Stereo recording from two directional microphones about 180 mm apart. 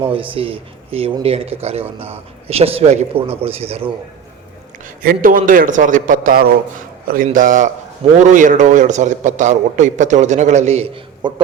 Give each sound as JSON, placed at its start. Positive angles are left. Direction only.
{"t": 0.1, "sound": "a man's voice", "side_deg": -30}
{"t": 5.0, "sound": "a man's voice", "side_deg": -50}